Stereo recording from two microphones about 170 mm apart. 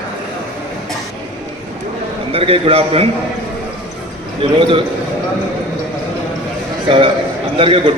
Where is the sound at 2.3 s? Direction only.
35° right (ahead or behind).